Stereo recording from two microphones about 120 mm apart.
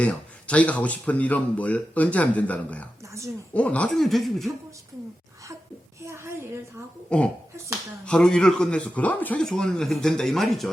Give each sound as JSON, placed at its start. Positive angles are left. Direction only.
{"t": 0.0, "sound": "speech", "side_deg": 10}
{"t": 6.0, "sound": "a sound", "side_deg": -20}
{"t": 7.1, "sound": "speech", "side_deg": 10}